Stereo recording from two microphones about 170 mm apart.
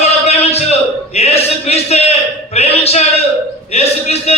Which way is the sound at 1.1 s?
40° left (ahead or behind).